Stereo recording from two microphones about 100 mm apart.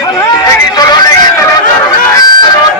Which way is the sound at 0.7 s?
40° left (ahead or behind).